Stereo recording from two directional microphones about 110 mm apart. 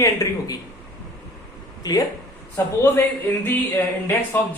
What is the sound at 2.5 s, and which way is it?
Speech, 20° left (ahead or behind).